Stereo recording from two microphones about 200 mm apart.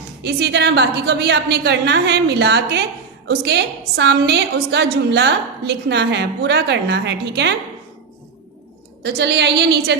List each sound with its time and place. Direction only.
0.2 s a woman's voice: 55° right (ahead or behind)
9.0 s a woman's voice: 55° right (ahead or behind)